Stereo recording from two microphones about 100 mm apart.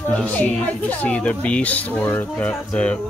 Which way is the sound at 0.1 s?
15° left (ahead or behind).